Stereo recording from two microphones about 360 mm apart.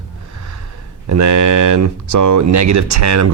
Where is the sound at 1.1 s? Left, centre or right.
Right.